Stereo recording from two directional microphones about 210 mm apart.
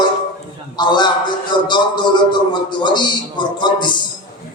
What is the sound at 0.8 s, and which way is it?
A man's voice, 20° left (ahead or behind).